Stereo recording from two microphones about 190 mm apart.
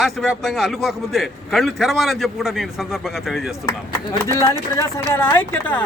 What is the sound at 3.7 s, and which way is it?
Speech, 20° left (ahead or behind).